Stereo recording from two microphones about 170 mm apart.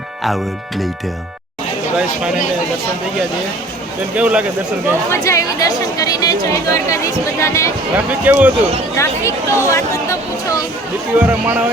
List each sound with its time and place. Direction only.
0.3 s speech: centre (ahead or behind)
2.0 s speech: 5° right (ahead or behind)
4.1 s speech: 5° right (ahead or behind)
5.1 s a woman's voice: 15° left (ahead or behind)
7.9 s speech: 10° right (ahead or behind)
9.0 s speech: 15° left (ahead or behind)
11.2 s speech: 10° right (ahead or behind)